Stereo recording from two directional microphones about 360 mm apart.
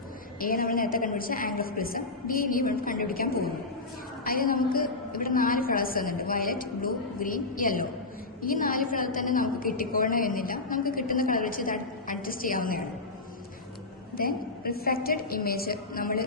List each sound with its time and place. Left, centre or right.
0.3 s a woman's voice: left
14.2 s a woman's voice: left